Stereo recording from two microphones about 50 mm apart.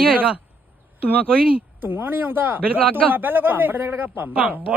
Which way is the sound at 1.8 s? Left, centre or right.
Right.